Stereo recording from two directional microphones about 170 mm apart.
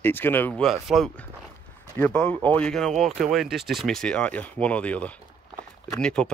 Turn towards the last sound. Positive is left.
turn(degrees=5)  # may be behind; listen again after turning